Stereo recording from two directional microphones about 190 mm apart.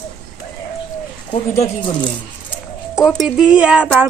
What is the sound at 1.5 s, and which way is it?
Speech, 20° left (ahead or behind).